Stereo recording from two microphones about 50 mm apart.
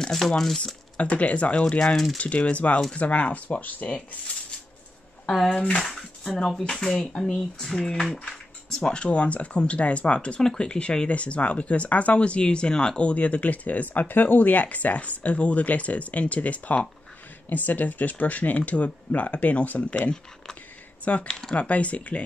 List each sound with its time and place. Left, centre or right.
0.0 s speech: centre
0.9 s speech: left
5.2 s speech: centre
11.1 s speech: left
20.0 s speech: centre
21.0 s speech: left
21.3 s speech: centre
21.5 s speech: left